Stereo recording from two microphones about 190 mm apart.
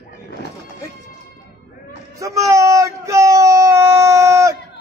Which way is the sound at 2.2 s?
15° right (ahead or behind).